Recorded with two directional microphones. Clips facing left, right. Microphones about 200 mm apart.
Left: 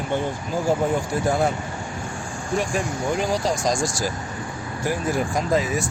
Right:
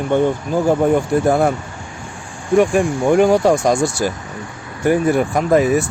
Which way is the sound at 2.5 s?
60° right (ahead or behind).